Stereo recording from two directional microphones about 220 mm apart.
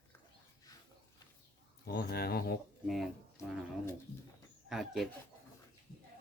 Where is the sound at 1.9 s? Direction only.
45° left (ahead or behind).